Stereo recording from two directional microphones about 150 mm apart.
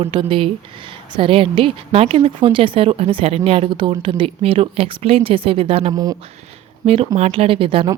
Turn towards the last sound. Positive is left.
turn(degrees=-35)  # may be behind; listen again after turning